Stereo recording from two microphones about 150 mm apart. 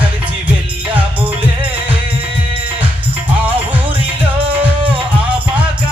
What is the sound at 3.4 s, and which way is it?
Music, 10° right (ahead or behind).